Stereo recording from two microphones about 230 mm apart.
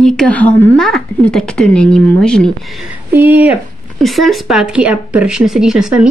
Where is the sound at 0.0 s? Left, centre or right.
Centre.